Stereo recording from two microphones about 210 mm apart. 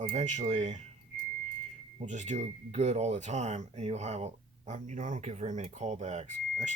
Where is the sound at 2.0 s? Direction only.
35° right (ahead or behind).